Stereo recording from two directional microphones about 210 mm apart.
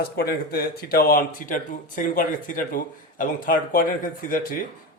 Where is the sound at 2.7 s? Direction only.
40° left (ahead or behind).